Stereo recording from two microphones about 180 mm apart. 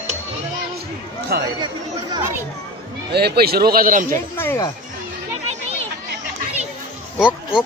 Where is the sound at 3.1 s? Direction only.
60° right (ahead or behind).